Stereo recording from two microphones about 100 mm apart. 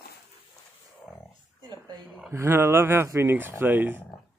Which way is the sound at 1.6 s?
45° right (ahead or behind).